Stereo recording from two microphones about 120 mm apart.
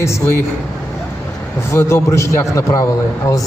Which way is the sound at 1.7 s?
25° left (ahead or behind).